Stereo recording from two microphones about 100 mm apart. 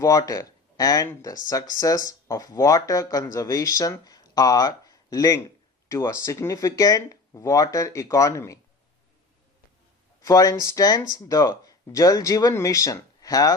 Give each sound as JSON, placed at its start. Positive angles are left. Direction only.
{"t": 0.0, "sound": "speech", "side_deg": 35}
{"t": 10.2, "sound": "speech", "side_deg": 35}